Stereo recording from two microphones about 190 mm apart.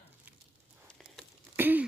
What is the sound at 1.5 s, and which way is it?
Throat clearing, 10° right (ahead or behind).